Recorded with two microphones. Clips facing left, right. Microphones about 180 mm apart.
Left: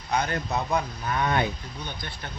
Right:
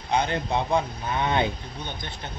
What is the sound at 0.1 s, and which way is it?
A man's voice, 25° right (ahead or behind).